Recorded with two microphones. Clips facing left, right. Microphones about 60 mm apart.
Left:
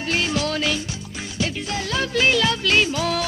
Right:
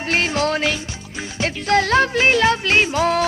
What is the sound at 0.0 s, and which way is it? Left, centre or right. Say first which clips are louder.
Music: right 3 dB; right.